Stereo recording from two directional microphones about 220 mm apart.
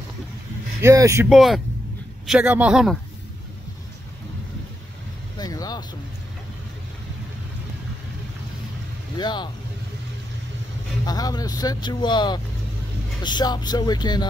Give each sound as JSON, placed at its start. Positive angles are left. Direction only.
{"t": 0.8, "sound": "speech", "side_deg": -15}
{"t": 1.3, "sound": "speech", "side_deg": 0}
{"t": 5.4, "sound": "vehicle", "side_deg": 15}
{"t": 9.1, "sound": "speech", "side_deg": 20}
{"t": 11.1, "sound": "speech", "side_deg": 15}